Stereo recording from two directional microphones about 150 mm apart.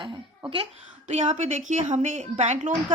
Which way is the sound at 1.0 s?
50° right (ahead or behind).